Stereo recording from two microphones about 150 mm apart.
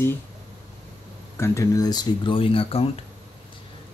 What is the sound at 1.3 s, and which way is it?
Speech, 20° left (ahead or behind).